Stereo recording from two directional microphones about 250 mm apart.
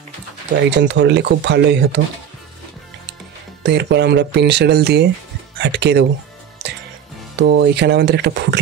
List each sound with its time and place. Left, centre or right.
0.7 s speech: right
3.6 s speech: right
7.3 s speech: right